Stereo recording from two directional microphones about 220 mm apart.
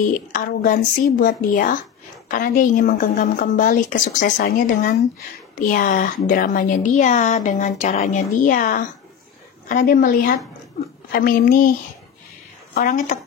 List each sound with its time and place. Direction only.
0.0 s a woman's voice: 35° left (ahead or behind)
12.7 s a woman's voice: 35° left (ahead or behind)